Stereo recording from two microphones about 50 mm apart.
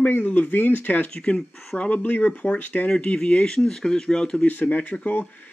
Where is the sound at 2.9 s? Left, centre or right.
Centre.